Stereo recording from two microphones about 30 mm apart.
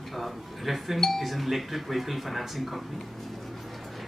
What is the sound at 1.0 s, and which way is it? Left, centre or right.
Doorbell, centre.